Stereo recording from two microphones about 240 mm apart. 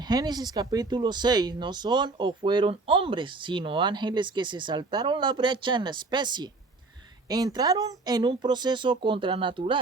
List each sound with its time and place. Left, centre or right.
0.1 s speech: centre